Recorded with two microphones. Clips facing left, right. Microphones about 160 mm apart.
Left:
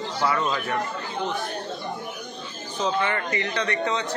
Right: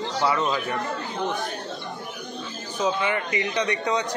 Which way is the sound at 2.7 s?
10° right (ahead or behind).